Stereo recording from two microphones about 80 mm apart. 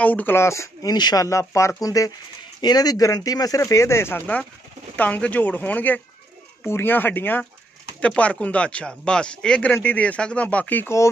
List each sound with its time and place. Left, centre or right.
0.0 s speech: centre
0.4 s speech: left
0.8 s speech: left
1.5 s speech: left
4.9 s speech: left